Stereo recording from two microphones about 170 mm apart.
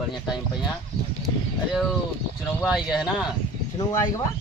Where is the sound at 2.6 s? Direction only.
5° right (ahead or behind).